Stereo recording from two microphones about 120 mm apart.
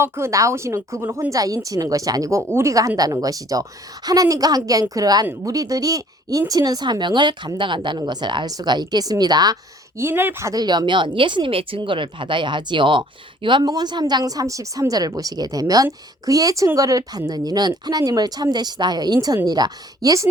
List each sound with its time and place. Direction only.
0.0 s a woman's voice: 25° right (ahead or behind)
10.0 s a woman's voice: 20° right (ahead or behind)
10.5 s a woman's voice: 35° right (ahead or behind)